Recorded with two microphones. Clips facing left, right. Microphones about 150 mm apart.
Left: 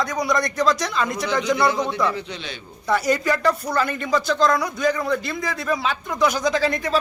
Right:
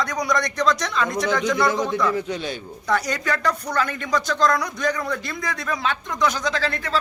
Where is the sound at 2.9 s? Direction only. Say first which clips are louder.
Left 3 dB; 5° left (ahead or behind).